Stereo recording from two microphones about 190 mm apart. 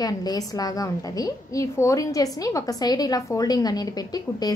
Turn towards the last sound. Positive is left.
turn(degrees=20)  # may be behind; listen again after turning